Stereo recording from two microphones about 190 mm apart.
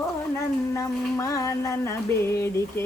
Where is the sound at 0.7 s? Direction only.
15° left (ahead or behind).